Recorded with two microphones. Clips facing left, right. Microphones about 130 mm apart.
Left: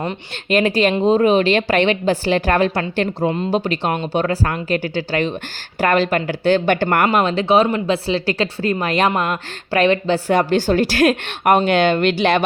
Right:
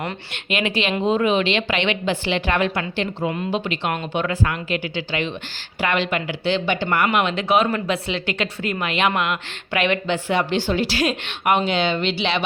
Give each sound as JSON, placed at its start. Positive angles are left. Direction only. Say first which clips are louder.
{"t": 0.5, "sound": "speech", "louder": "left 7 dB", "side_deg": 40}
{"t": 7.1, "sound": "speech", "louder": "left 4 dB", "side_deg": 35}